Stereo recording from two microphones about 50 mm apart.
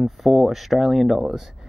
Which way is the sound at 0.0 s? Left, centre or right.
Centre.